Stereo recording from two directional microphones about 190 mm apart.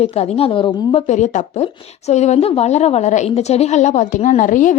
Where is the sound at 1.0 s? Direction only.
40° left (ahead or behind).